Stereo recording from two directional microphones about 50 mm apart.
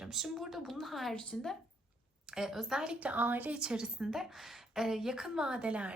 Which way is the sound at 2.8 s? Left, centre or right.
Centre.